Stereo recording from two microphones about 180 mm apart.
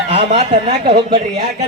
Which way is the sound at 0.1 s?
35° right (ahead or behind).